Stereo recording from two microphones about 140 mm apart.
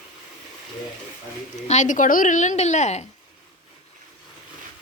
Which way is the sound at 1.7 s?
60° left (ahead or behind).